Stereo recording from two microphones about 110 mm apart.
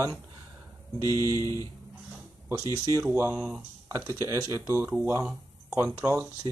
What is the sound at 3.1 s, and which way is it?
Speech, 25° right (ahead or behind).